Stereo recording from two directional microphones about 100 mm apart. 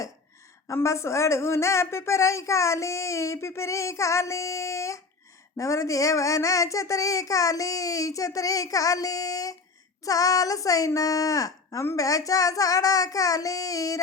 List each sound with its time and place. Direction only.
0.7 s a woman's voice: 30° left (ahead or behind)